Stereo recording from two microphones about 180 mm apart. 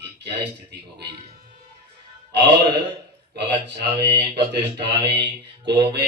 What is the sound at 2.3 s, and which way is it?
A man's voice, 65° right (ahead or behind).